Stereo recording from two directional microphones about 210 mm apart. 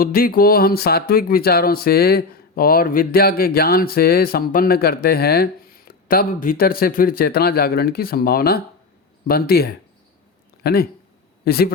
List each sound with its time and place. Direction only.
0.0 s speech: 45° left (ahead or behind)